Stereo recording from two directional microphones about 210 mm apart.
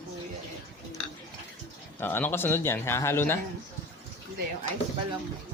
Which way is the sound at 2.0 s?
10° left (ahead or behind).